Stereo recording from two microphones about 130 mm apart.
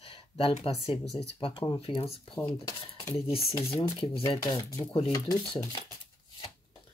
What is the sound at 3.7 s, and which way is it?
Speech, 45° left (ahead or behind).